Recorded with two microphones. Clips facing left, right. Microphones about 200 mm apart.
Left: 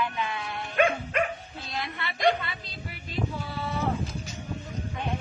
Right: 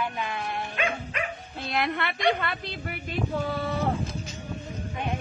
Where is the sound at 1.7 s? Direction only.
65° right (ahead or behind).